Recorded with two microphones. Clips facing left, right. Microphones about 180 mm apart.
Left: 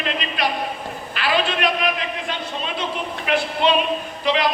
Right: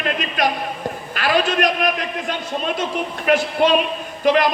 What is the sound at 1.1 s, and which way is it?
A man's voice, 45° right (ahead or behind).